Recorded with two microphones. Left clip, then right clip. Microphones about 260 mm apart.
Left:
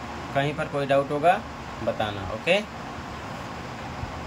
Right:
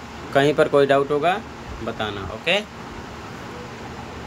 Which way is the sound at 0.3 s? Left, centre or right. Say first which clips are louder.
Right 10 dB; centre.